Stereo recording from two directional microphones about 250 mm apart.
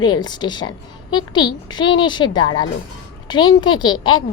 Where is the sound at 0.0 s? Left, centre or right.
Centre.